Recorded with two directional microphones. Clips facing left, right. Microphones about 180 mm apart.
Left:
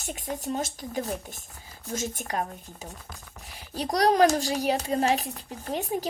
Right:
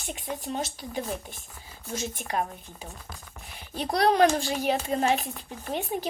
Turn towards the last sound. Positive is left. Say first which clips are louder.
# left 1 dB
turn(degrees=40)  # may be behind; listen again after turning